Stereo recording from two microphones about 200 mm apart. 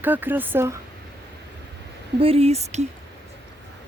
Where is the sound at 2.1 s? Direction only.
30° right (ahead or behind).